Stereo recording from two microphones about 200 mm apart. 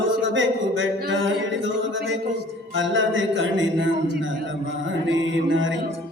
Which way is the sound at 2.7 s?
70° right (ahead or behind).